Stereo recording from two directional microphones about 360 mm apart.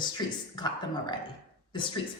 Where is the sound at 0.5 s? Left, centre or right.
Centre.